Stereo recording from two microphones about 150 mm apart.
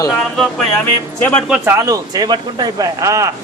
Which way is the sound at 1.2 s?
15° left (ahead or behind).